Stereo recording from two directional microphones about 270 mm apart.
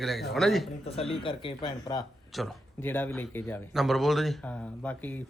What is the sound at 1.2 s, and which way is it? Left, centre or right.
Speech, centre.